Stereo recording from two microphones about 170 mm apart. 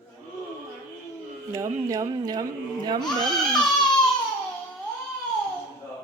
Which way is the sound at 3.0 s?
5° left (ahead or behind).